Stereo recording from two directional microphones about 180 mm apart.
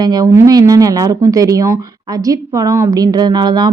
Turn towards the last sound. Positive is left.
turn(degrees=-25)  # may be behind; listen again after turning